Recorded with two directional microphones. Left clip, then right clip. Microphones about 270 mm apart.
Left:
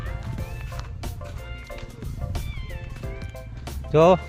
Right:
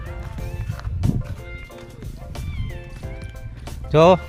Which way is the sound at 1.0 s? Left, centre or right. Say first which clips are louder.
Right 13 dB; centre.